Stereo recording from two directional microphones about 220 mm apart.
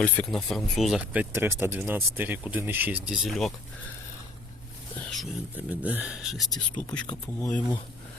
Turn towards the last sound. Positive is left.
turn(degrees=5)  # may be behind; listen again after turning